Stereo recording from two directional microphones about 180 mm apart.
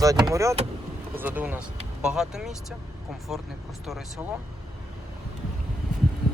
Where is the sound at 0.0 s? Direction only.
20° right (ahead or behind); by 2.6 s 5° right (ahead or behind).